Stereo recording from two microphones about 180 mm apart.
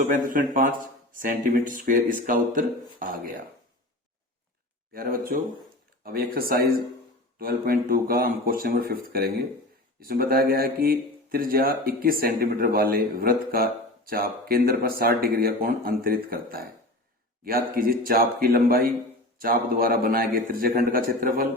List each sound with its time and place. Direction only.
0.1 s a man's voice: 45° right (ahead or behind)
4.9 s a man's voice: 55° right (ahead or behind)